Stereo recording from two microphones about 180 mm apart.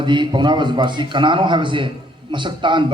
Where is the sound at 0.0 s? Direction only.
25° right (ahead or behind).